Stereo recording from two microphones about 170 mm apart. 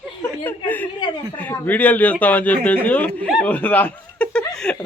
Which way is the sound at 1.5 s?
10° left (ahead or behind).